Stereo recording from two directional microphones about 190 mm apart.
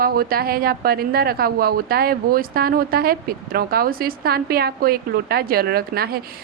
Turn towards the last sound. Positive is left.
turn(degrees=-55)  # may be behind; listen again after turning